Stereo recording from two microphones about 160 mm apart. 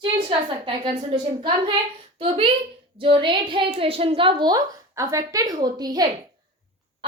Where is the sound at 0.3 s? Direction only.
30° right (ahead or behind).